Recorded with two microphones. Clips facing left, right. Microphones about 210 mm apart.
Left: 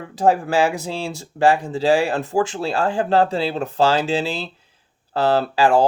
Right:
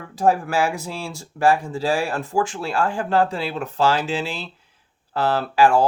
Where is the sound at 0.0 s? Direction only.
25° left (ahead or behind).